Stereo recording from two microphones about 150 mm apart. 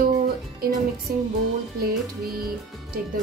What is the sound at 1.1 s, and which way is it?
Music, 90° right.